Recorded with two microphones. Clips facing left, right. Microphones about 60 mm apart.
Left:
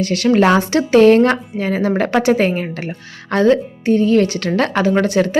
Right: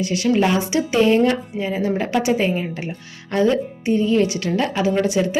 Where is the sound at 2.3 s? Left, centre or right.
Left.